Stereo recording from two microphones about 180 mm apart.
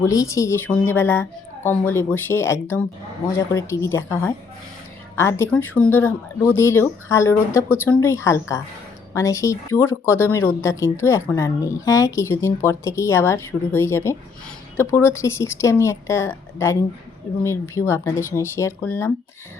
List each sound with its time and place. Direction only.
0.0 s speech: 15° left (ahead or behind)